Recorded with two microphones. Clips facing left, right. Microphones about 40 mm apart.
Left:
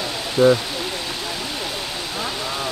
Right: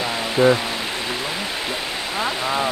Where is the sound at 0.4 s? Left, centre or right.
Right.